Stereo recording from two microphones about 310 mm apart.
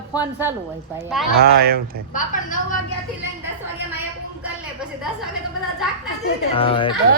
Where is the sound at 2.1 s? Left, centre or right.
Left.